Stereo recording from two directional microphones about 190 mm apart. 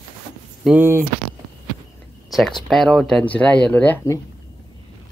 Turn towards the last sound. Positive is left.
turn(degrees=15)  # may be behind; listen again after turning